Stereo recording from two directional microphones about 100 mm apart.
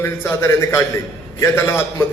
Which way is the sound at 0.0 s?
25° left (ahead or behind).